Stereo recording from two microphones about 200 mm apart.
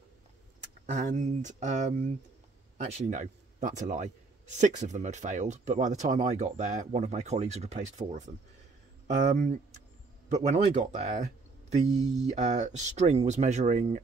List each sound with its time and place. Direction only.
0.9 s a man's voice: 35° right (ahead or behind)